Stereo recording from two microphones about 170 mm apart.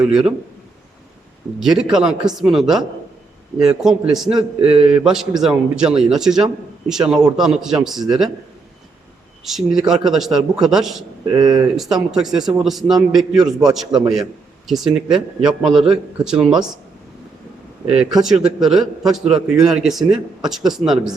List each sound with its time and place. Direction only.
0.0 s a man's voice: 5° right (ahead or behind)
1.5 s a man's voice: centre (ahead or behind)
9.4 s a man's voice: centre (ahead or behind)
11.3 s speech: 20° right (ahead or behind)
11.8 s a man's voice: centre (ahead or behind)
17.9 s a man's voice: 5° right (ahead or behind)